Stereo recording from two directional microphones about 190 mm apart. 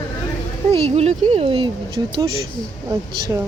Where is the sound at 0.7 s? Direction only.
30° right (ahead or behind).